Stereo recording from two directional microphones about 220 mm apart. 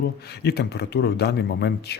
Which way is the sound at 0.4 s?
45° left (ahead or behind).